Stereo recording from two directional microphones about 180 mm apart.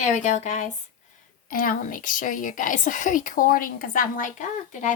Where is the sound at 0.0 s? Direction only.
40° left (ahead or behind).